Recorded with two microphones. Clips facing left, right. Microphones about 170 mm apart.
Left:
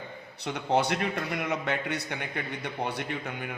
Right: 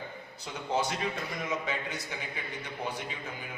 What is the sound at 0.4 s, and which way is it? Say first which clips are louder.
A man's voice: left 5 dB; 70° left (ahead or behind).